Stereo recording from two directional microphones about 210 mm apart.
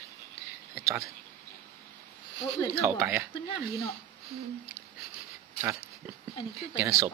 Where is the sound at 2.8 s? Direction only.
10° right (ahead or behind).